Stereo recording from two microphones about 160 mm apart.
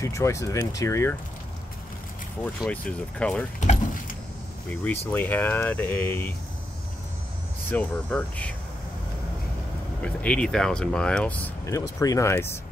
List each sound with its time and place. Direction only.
0.0 s speech: 20° left (ahead or behind)
2.4 s speech: 10° left (ahead or behind)
3.5 s vehicle: 50° left (ahead or behind)
4.6 s speech: 10° left (ahead or behind)
7.7 s speech: 10° left (ahead or behind)
10.0 s speech: 5° left (ahead or behind)